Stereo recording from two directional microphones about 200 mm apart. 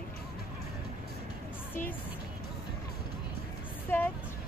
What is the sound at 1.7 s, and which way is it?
Speech, 10° left (ahead or behind).